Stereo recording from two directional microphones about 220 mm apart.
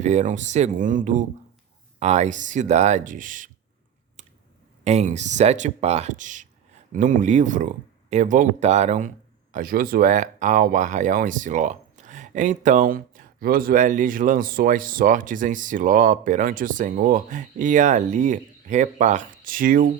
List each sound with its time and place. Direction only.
0.0 s speech: 30° right (ahead or behind)
4.2 s a sound: 35° right (ahead or behind)
4.8 s speech: 30° right (ahead or behind)